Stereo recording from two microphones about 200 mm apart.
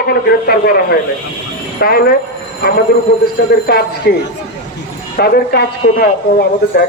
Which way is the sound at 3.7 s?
50° left (ahead or behind).